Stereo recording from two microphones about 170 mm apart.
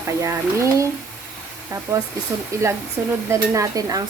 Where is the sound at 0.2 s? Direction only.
15° right (ahead or behind).